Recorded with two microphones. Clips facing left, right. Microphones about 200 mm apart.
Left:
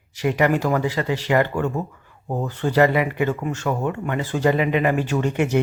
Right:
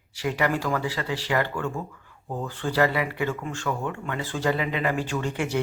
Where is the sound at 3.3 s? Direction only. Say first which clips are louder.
Left 5 dB; 40° left (ahead or behind).